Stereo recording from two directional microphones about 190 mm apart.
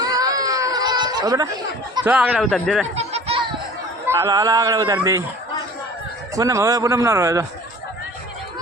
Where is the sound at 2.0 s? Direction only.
10° right (ahead or behind).